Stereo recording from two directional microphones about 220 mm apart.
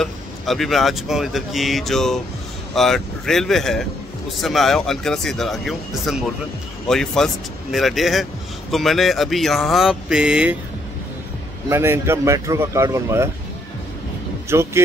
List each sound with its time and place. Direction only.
0.0 s speech: centre (ahead or behind)
11.7 s speech: 10° right (ahead or behind)
14.5 s speech: 10° right (ahead or behind)